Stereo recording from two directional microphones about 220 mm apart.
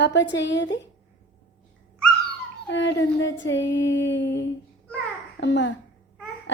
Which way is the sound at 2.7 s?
55° left (ahead or behind).